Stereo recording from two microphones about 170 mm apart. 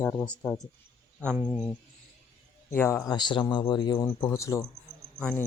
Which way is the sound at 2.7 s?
15° left (ahead or behind).